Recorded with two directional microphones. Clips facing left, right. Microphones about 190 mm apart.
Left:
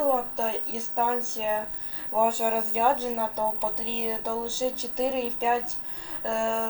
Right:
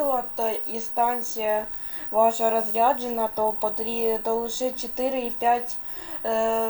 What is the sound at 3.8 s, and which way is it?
Speech, 45° right (ahead or behind).